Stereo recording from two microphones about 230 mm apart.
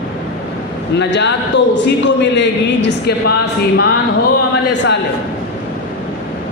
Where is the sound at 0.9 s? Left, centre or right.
Left.